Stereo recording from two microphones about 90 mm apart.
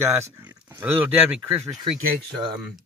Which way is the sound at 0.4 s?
25° right (ahead or behind).